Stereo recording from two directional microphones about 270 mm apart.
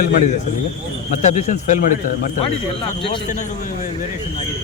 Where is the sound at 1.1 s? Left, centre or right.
Left.